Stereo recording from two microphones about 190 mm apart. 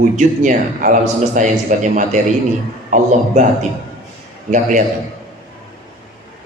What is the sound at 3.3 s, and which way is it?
Speech, 35° right (ahead or behind).